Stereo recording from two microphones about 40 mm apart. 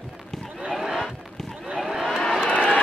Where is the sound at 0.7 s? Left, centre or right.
Centre.